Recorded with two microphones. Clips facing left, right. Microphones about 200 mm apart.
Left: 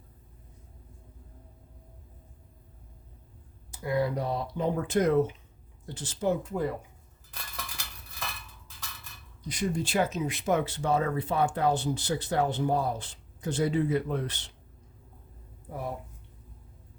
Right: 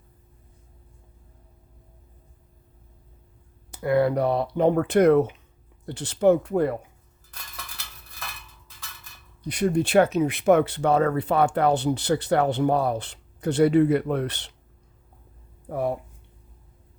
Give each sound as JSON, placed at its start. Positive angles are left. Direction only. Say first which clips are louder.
{"t": 3.7, "sound": "speech", "louder": "right 7 dB", "side_deg": -65}
{"t": 9.4, "sound": "speech", "louder": "right 8 dB", "side_deg": -60}
{"t": 15.7, "sound": "speech", "louder": "right 9 dB", "side_deg": -60}